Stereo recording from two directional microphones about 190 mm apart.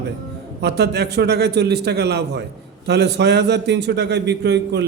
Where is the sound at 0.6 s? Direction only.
60° right (ahead or behind).